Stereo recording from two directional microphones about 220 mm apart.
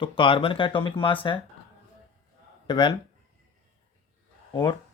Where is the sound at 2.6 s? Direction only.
20° left (ahead or behind).